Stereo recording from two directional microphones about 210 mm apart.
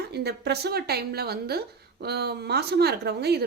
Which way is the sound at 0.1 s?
50° right (ahead or behind).